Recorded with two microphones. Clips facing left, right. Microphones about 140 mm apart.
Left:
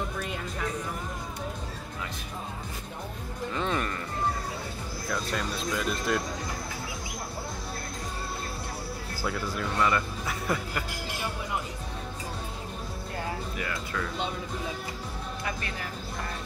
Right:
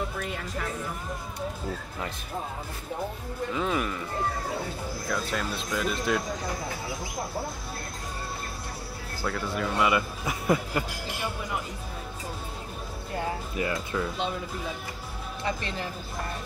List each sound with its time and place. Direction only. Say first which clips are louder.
0.2 s speech: right 1 dB; centre (ahead or behind)
3.5 s speech: right 1 dB; 5° right (ahead or behind)
5.1 s speech: even; centre (ahead or behind)
9.6 s speech: right 2 dB; 10° right (ahead or behind)
13.6 s speech: right 4 dB; 20° right (ahead or behind)